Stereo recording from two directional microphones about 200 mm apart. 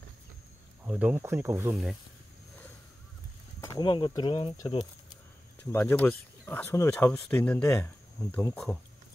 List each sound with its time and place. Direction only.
0.8 s speech: 5° right (ahead or behind)
3.6 s speech: 20° left (ahead or behind)
5.7 s speech: 10° left (ahead or behind)